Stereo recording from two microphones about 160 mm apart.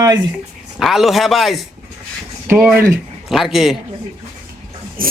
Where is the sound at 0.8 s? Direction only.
Centre (ahead or behind).